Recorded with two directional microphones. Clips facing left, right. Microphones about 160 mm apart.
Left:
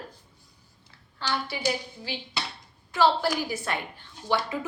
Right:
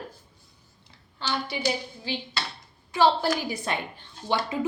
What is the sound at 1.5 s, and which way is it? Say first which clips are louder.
A woman's voice: right 1 dB; 20° right (ahead or behind).